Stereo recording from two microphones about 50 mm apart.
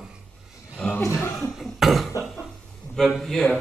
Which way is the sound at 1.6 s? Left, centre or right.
Centre.